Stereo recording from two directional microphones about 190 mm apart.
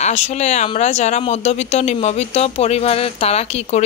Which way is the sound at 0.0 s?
35° left (ahead or behind).